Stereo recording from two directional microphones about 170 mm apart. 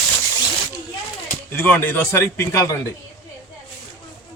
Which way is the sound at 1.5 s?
10° left (ahead or behind).